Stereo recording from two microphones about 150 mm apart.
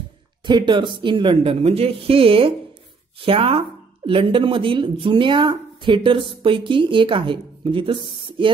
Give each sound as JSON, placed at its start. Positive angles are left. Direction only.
{"t": 0.5, "sound": "speech", "side_deg": -30}